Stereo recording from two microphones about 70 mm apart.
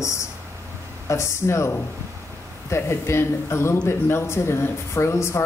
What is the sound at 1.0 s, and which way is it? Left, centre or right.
Speech, left.